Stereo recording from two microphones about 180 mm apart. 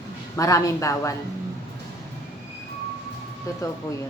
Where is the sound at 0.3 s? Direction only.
20° left (ahead or behind).